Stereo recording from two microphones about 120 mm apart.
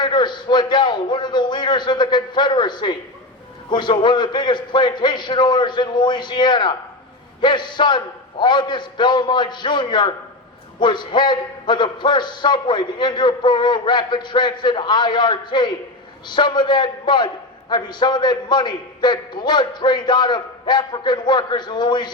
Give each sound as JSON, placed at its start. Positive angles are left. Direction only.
{"t": 0.0, "sound": "a man's voice", "side_deg": 40}